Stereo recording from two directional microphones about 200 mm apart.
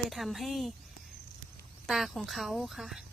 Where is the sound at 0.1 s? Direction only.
Centre (ahead or behind).